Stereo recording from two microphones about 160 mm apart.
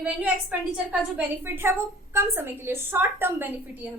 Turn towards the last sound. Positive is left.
turn(degrees=-15)  # may be behind; listen again after turning